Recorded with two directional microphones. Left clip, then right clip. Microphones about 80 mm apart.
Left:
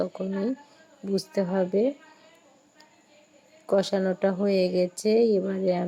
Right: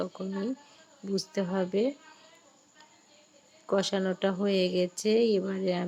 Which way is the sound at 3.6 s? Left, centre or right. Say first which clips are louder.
Left 4 dB; left.